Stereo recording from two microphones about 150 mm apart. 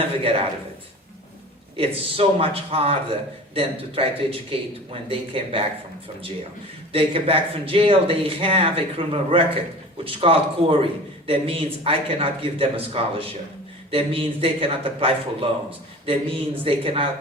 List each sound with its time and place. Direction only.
0.0 s a sound: 40° right (ahead or behind)
1.7 s a man's voice: 40° right (ahead or behind)
6.9 s a man's voice: 40° right (ahead or behind)